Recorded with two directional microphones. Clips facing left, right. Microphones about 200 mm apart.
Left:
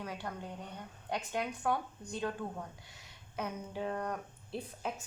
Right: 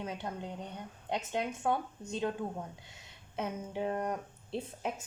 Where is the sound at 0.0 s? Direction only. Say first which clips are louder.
Right 3 dB; 20° right (ahead or behind).